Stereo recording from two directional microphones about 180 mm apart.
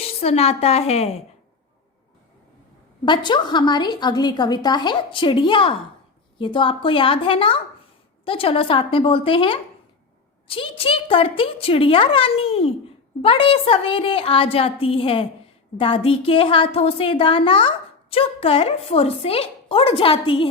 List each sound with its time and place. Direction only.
0.2 s a woman's voice: 35° left (ahead or behind)
3.1 s a woman's voice: 25° left (ahead or behind)